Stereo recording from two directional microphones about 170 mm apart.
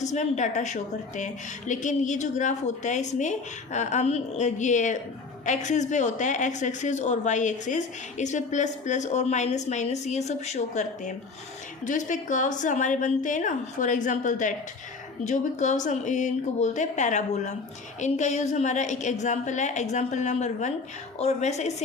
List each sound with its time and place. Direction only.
0.0 s a woman's voice: 45° left (ahead or behind)